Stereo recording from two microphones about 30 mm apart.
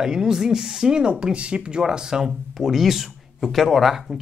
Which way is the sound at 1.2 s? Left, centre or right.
Right.